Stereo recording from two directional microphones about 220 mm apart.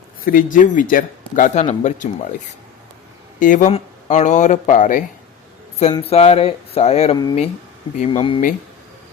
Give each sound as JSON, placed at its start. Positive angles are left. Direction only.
{"t": 0.3, "sound": "speech", "side_deg": 40}
{"t": 3.4, "sound": "speech", "side_deg": 35}